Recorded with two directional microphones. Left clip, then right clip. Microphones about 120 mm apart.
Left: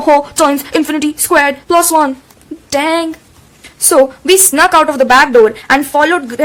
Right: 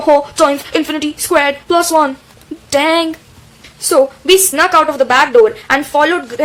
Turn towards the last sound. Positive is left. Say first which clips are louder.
# left 1 dB
turn(degrees=30)  # may be behind; listen again after turning